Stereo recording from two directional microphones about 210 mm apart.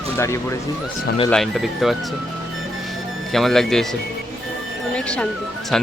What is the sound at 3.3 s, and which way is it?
Speech, centre (ahead or behind).